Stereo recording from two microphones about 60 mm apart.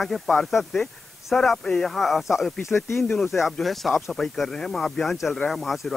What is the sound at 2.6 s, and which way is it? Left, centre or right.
Speech, left.